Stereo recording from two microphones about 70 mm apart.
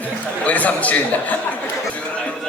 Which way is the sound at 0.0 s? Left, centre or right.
Left.